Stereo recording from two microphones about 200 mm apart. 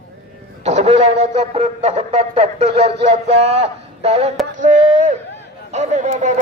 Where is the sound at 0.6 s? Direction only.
35° right (ahead or behind).